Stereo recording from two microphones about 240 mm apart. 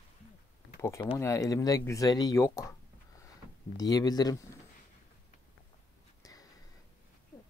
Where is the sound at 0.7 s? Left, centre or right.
Centre.